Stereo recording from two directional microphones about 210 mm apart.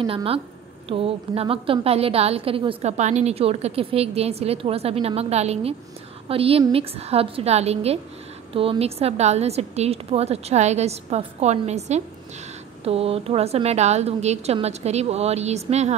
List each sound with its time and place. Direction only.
0.0 s a woman's voice: 25° right (ahead or behind)